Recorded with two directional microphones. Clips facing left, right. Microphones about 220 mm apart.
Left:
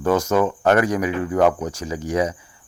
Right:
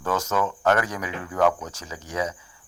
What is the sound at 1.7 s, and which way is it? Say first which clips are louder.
Speech: left 9 dB; 15° left (ahead or behind).